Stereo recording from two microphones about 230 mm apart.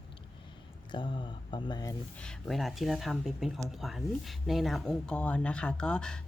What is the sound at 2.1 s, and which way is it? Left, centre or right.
Speech, centre.